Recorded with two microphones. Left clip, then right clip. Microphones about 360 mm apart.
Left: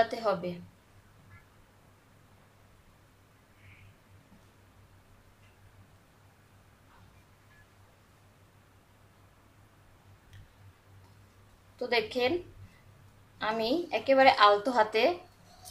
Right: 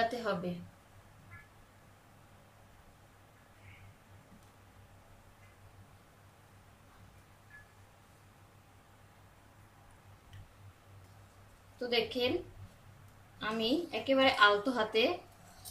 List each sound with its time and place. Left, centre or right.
0.1 s a woman's voice: centre
11.9 s a woman's voice: centre
13.4 s a woman's voice: centre